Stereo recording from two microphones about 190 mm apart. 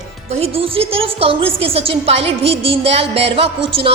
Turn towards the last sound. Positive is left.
turn(degrees=-30)  # may be behind; listen again after turning